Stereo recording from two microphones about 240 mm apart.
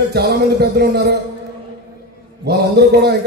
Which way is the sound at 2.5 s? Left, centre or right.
Right.